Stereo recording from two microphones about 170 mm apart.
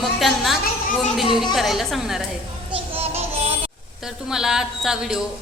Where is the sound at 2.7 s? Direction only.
35° right (ahead or behind).